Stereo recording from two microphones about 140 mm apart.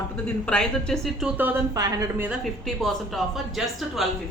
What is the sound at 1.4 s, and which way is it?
Speech, 15° right (ahead or behind).